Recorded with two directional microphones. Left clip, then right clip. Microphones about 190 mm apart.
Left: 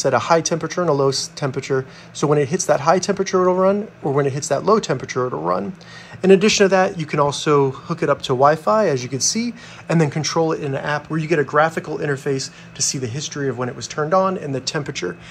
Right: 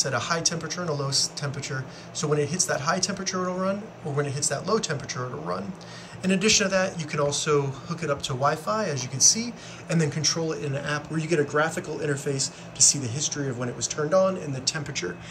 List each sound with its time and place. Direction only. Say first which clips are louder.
0.0 s speech: left 9 dB; 20° left (ahead or behind)
6.2 s speech: left 10 dB; 20° left (ahead or behind)